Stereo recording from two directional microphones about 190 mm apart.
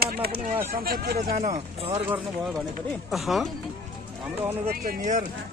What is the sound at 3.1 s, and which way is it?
Speech, centre (ahead or behind).